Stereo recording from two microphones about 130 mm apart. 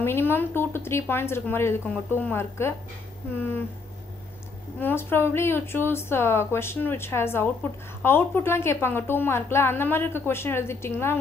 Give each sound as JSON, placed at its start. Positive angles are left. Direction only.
{"t": 0.0, "sound": "a woman's voice", "side_deg": 15}
{"t": 4.7, "sound": "a woman's voice", "side_deg": 15}